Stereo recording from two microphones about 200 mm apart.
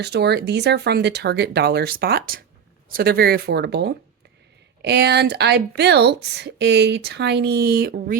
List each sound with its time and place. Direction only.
0.0 s speech: 55° right (ahead or behind)